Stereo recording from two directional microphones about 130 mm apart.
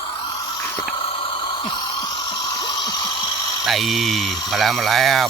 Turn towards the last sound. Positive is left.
turn(degrees=0)  # may be behind; listen again after turning